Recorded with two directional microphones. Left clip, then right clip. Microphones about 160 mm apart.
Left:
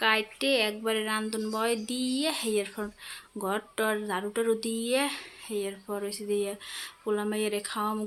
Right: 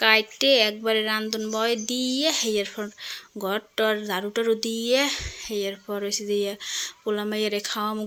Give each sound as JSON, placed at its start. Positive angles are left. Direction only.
{"t": 0.0, "sound": "speech", "side_deg": -25}